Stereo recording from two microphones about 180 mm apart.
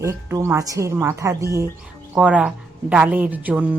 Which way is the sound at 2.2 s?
5° right (ahead or behind).